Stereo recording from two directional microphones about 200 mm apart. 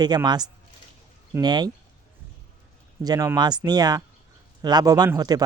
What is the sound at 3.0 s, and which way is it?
Speech, 20° right (ahead or behind).